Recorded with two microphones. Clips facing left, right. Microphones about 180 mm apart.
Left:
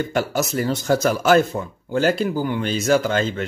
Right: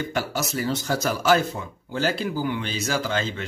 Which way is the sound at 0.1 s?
50° left (ahead or behind).